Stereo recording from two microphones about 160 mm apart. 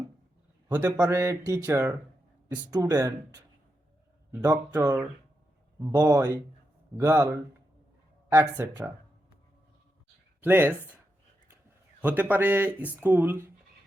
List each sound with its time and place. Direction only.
1.0 s speech: 20° right (ahead or behind)
10.4 s speech: 10° right (ahead or behind)
12.0 s speech: 10° right (ahead or behind)